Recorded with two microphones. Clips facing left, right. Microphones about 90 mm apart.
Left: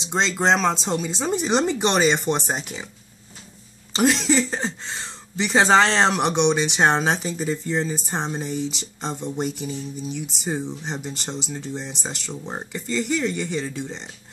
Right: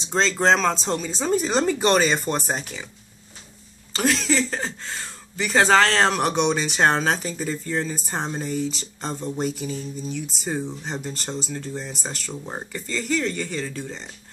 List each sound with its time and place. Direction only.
0.1 s speech: 15° left (ahead or behind)
3.9 s speech: 25° left (ahead or behind)